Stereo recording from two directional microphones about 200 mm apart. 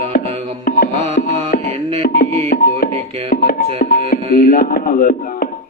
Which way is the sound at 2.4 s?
45° left (ahead or behind).